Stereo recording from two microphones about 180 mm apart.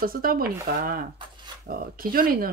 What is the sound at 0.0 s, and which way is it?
Speech, 55° right (ahead or behind).